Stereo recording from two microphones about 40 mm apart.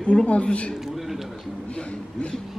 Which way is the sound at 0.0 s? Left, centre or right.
Left.